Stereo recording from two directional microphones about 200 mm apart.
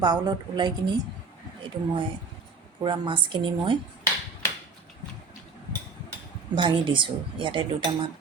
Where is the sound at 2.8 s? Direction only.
25° right (ahead or behind).